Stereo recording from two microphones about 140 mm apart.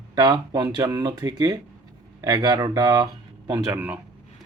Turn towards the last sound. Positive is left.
turn(degrees=-25)  # may be behind; listen again after turning